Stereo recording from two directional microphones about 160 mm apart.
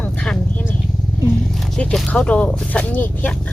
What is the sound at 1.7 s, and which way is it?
Speech, 5° left (ahead or behind).